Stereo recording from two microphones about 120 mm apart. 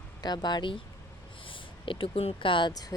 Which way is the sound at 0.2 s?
35° left (ahead or behind).